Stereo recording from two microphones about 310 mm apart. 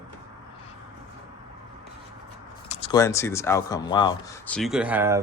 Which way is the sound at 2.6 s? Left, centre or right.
Centre.